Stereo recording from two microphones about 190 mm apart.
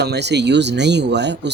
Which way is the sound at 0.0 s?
60° right (ahead or behind).